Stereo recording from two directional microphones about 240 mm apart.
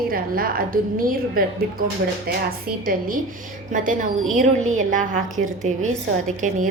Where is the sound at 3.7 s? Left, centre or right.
Right.